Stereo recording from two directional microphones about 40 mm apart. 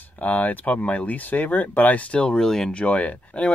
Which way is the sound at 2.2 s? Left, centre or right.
Centre.